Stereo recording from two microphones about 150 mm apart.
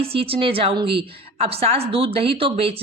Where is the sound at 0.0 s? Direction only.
40° right (ahead or behind).